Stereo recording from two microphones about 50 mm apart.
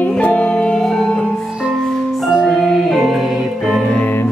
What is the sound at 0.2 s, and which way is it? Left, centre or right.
Music, left.